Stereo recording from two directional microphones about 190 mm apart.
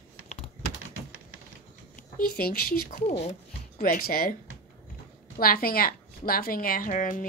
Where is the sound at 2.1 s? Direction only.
50° left (ahead or behind).